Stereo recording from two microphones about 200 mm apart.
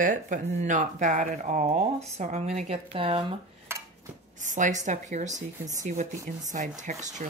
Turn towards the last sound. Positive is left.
turn(degrees=-35)  # may be behind; listen again after turning